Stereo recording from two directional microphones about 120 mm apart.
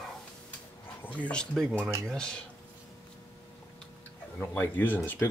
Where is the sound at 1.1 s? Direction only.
10° left (ahead or behind).